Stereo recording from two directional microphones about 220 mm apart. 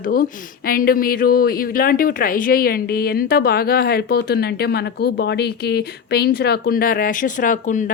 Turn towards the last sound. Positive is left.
turn(degrees=35)  # may be behind; listen again after turning